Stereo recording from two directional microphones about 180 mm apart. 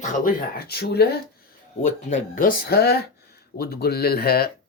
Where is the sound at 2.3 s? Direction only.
50° left (ahead or behind).